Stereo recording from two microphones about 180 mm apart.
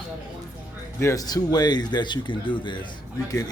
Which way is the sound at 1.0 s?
15° left (ahead or behind).